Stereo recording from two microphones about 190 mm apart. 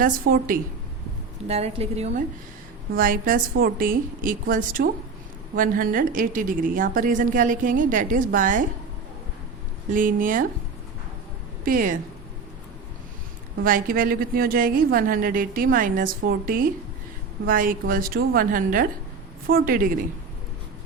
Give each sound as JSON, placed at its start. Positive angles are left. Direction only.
{"t": 0.0, "sound": "a woman's voice", "side_deg": -50}
{"t": 1.5, "sound": "a woman's voice", "side_deg": -35}
{"t": 2.9, "sound": "a woman's voice", "side_deg": -50}
{"t": 9.9, "sound": "a woman's voice", "side_deg": -45}
{"t": 11.6, "sound": "a woman's voice", "side_deg": -45}
{"t": 13.7, "sound": "a woman's voice", "side_deg": -50}